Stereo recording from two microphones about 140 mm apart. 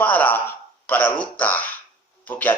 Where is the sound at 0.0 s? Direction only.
10° left (ahead or behind).